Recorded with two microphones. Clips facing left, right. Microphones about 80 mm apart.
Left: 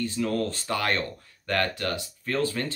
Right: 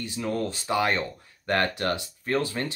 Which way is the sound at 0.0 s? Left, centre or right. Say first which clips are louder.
Left 2 dB; centre.